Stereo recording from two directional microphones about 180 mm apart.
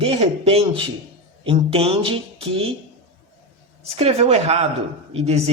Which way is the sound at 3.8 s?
35° right (ahead or behind).